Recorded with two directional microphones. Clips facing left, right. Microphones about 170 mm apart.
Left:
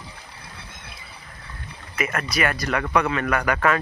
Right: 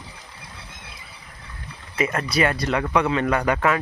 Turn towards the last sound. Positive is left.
turn(degrees=-20)  # may be behind; listen again after turning